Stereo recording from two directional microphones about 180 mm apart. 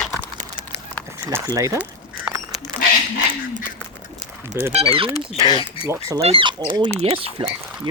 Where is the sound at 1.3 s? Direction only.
20° right (ahead or behind).